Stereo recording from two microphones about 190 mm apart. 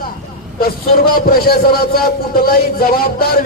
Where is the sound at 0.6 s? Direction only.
50° left (ahead or behind).